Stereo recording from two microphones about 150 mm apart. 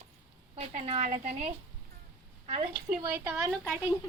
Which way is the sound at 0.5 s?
45° right (ahead or behind).